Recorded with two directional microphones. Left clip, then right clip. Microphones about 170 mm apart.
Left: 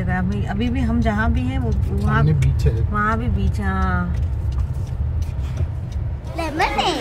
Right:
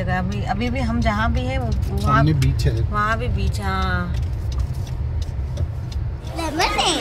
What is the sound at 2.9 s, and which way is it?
Speech, 25° right (ahead or behind).